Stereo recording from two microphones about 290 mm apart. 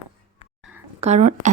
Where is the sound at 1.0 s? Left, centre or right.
Right.